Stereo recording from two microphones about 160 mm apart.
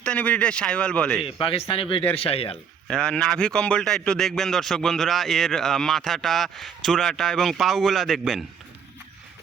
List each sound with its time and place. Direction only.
0.0 s speech: 5° left (ahead or behind)
1.2 s speech: 35° left (ahead or behind)
2.8 s a man's voice: 5° left (ahead or behind)